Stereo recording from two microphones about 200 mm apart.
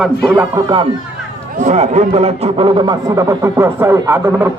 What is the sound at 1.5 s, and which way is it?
A man's voice, 35° right (ahead or behind).